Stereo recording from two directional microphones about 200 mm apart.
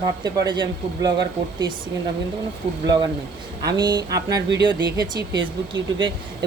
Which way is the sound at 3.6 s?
20° right (ahead or behind).